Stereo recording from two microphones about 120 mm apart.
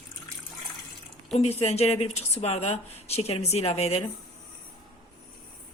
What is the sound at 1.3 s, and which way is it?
Speech, 60° left (ahead or behind).